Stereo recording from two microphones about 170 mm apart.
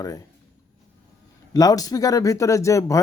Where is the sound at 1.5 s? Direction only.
20° left (ahead or behind).